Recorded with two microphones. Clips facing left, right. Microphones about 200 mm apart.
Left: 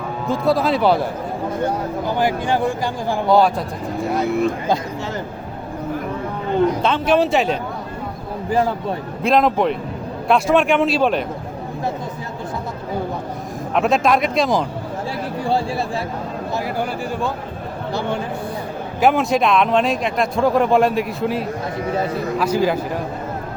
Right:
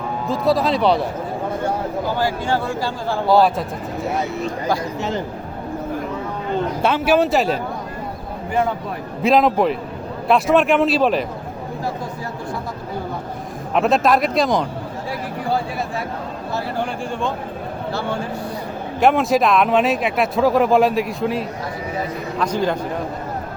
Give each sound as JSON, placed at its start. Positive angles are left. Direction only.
{"t": 0.3, "sound": "speech", "side_deg": 0}
{"t": 2.1, "sound": "speech", "side_deg": 15}
{"t": 3.2, "sound": "speech", "side_deg": 0}
{"t": 6.8, "sound": "speech", "side_deg": -10}
{"t": 8.4, "sound": "speech", "side_deg": 35}
{"t": 9.2, "sound": "speech", "side_deg": 0}
{"t": 13.7, "sound": "speech", "side_deg": 0}
{"t": 16.7, "sound": "speech", "side_deg": 5}
{"t": 18.9, "sound": "speech", "side_deg": 0}